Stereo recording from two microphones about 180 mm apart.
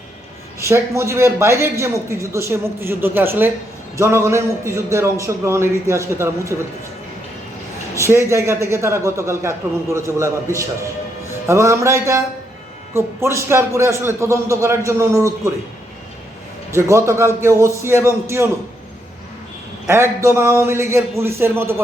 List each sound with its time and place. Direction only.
0.6 s a man's voice: 15° right (ahead or behind)
7.9 s a man's voice: 15° right (ahead or behind)
11.3 s music: 15° right (ahead or behind)
12.9 s a man's voice: 15° right (ahead or behind)
16.7 s a man's voice: 15° right (ahead or behind)
19.9 s a man's voice: 15° right (ahead or behind)